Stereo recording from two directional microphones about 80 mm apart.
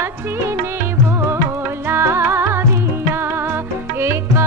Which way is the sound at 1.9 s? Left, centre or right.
Right.